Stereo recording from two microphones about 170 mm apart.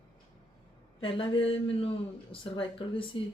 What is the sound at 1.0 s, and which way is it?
Speech, 30° left (ahead or behind).